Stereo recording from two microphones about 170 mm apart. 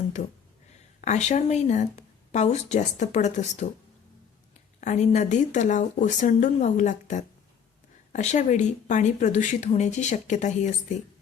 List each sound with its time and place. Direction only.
1.0 s speech: 45° left (ahead or behind)
4.8 s speech: 45° left (ahead or behind)